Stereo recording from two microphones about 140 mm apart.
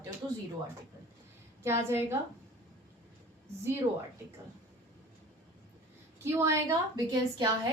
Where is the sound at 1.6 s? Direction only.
15° right (ahead or behind).